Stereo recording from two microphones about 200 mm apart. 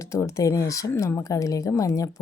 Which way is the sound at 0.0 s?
15° left (ahead or behind).